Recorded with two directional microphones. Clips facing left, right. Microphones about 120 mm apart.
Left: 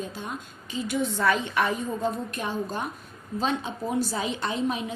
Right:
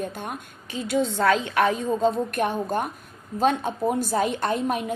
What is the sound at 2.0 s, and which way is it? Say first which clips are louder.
A woman's voice: right 7 dB; 60° right (ahead or behind).